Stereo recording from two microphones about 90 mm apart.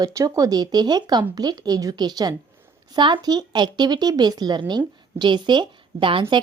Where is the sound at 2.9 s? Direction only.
60° right (ahead or behind).